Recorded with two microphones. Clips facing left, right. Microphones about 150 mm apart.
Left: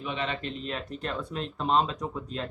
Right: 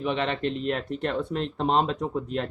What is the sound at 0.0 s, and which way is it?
Speech, 55° right (ahead or behind).